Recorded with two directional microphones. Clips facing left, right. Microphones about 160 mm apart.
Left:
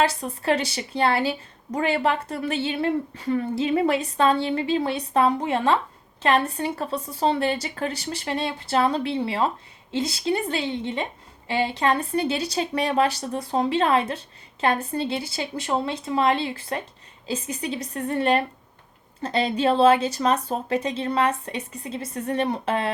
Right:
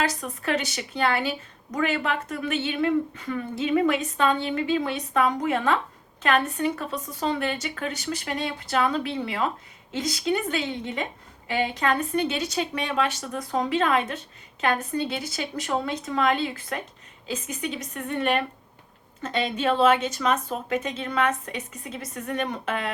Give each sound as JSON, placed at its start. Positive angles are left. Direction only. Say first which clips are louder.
{"t": 0.0, "sound": "a woman's voice", "louder": "left 4 dB", "side_deg": 30}